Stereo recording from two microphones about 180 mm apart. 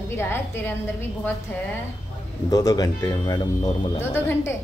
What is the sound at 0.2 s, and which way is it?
Speech, 15° left (ahead or behind).